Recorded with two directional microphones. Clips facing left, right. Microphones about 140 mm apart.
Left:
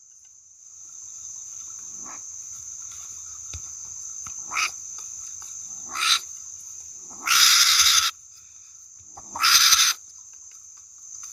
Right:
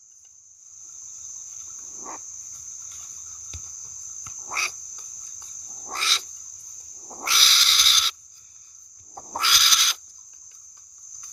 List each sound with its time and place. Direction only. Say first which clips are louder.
4.2 s cricket: left 1 dB; 25° right (ahead or behind)
5.8 s a sound: left 1 dB; 35° right (ahead or behind)
7.1 s cat: left 2 dB; 30° right (ahead or behind)
9.1 s owl: left 1 dB; 20° right (ahead or behind)